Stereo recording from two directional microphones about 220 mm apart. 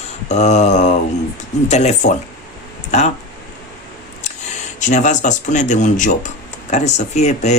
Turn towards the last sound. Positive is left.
turn(degrees=30)  # may be behind; listen again after turning